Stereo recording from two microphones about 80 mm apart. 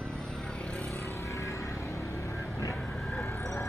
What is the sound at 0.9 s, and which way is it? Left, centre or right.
Vehicle, left.